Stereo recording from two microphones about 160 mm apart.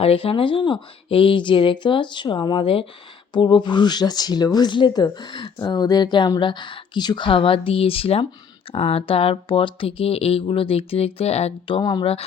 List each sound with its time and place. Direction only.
0.0 s speech: 35° left (ahead or behind)
11.8 s speech: 25° left (ahead or behind)